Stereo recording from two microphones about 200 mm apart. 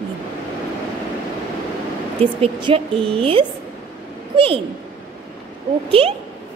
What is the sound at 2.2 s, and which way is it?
A woman's voice, 25° right (ahead or behind).